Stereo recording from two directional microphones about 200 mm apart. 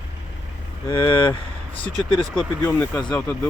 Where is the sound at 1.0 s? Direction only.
25° left (ahead or behind).